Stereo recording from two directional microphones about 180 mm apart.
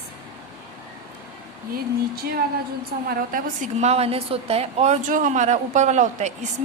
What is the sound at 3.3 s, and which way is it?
A woman's voice, 40° right (ahead or behind).